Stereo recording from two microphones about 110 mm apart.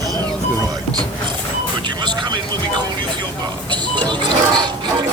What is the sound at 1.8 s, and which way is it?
Music, 45° right (ahead or behind).